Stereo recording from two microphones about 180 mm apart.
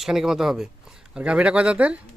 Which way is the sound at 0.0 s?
Centre (ahead or behind).